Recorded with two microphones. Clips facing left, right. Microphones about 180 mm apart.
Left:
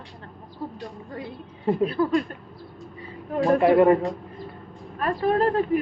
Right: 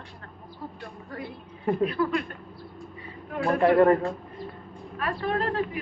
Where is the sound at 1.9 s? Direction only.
35° left (ahead or behind).